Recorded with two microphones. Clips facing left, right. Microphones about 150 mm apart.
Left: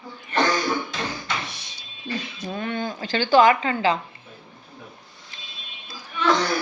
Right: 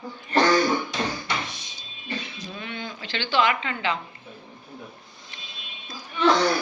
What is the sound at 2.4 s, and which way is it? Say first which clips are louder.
Speech: left 7 dB; 50° left (ahead or behind).